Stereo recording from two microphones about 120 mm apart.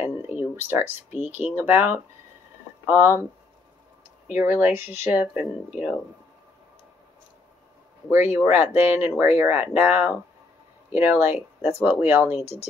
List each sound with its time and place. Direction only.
0.0 s speech: 15° right (ahead or behind)
4.3 s speech: 15° right (ahead or behind)
8.1 s speech: 20° right (ahead or behind)